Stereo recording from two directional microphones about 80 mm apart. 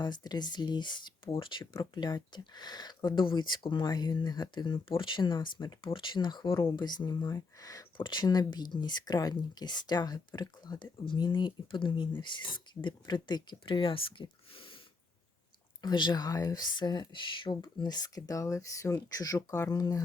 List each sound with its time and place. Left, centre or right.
0.0 s speech: left
1.8 s speech: left
5.8 s speech: left
7.9 s speech: left
15.8 s speech: left